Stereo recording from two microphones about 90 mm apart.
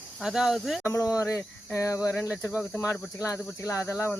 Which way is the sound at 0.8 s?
35° left (ahead or behind).